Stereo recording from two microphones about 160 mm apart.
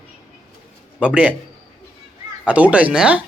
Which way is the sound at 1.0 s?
10° right (ahead or behind).